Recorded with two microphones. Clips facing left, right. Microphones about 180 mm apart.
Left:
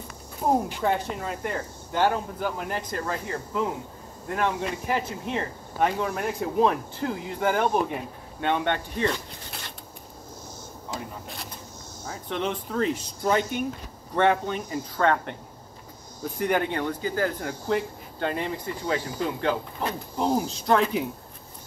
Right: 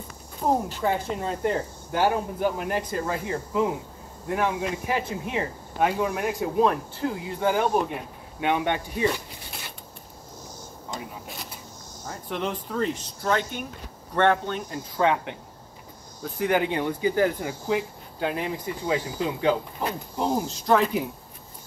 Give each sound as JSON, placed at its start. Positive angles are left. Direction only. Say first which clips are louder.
{"t": 0.4, "sound": "speech", "louder": "even", "side_deg": 5}
{"t": 0.8, "sound": "speech", "louder": "even", "side_deg": -10}
{"t": 1.2, "sound": "speech", "louder": "right 5 dB", "side_deg": -30}
{"t": 1.9, "sound": "speech", "louder": "even", "side_deg": -10}
{"t": 8.4, "sound": "speech", "louder": "right 1 dB", "side_deg": -10}
{"t": 10.9, "sound": "a sound", "louder": "left 1 dB", "side_deg": 0}
{"t": 12.1, "sound": "speech", "louder": "left 1 dB", "side_deg": 0}
{"t": 14.1, "sound": "speech", "louder": "even", "side_deg": 5}
{"t": 15.0, "sound": "speech", "louder": "right 1 dB", "side_deg": -10}
{"t": 16.3, "sound": "speech", "louder": "right 1 dB", "side_deg": 0}
{"t": 16.7, "sound": "speech", "louder": "right 3 dB", "side_deg": -15}
{"t": 17.4, "sound": "speech", "louder": "even", "side_deg": -5}
{"t": 20.2, "sound": "speech", "louder": "left 1 dB", "side_deg": 0}